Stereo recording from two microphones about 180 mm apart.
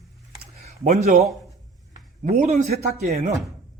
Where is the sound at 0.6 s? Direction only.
40° right (ahead or behind).